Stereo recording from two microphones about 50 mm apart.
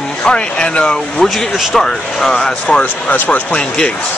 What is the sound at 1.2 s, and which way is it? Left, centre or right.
Speech, centre.